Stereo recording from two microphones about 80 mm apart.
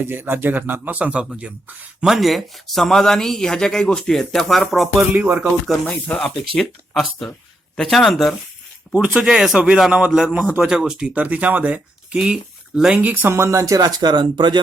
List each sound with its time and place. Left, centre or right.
0.0 s a man's voice: right
2.0 s speech: centre
5.1 s speech: centre
5.9 s speech: centre
9.0 s speech: centre
13.0 s speech: right